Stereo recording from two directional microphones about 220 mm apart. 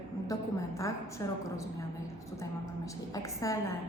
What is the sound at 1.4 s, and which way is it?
A woman's voice, 15° left (ahead or behind).